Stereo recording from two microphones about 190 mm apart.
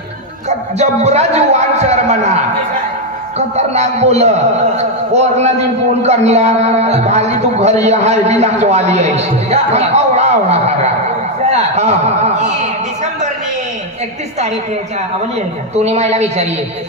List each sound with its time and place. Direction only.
0.5 s a man's voice: 35° right (ahead or behind)
15.7 s a man's voice: 35° right (ahead or behind)